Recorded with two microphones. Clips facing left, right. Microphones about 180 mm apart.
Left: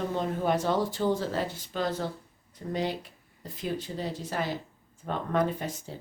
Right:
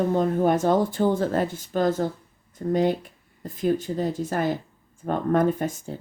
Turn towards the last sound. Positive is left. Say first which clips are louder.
# right 7 dB
turn(degrees=-50)  # may be behind; listen again after turning